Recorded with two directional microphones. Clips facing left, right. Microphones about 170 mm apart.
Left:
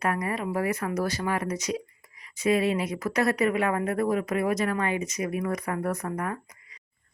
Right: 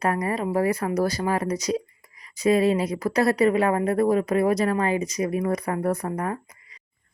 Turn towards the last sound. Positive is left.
turn(degrees=-30)  # may be behind; listen again after turning